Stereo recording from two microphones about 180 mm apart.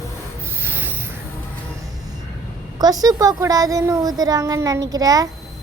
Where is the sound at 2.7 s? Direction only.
20° right (ahead or behind).